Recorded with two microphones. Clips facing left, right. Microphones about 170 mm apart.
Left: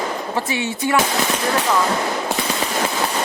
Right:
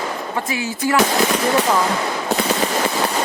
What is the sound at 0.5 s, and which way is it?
Speech, 25° left (ahead or behind).